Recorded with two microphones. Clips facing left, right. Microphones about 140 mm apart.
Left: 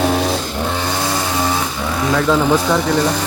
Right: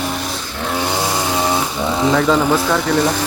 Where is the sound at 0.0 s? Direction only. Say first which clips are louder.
Left 7 dB; 90° left.